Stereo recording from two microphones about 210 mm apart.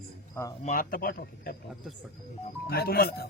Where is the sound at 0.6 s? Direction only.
40° left (ahead or behind).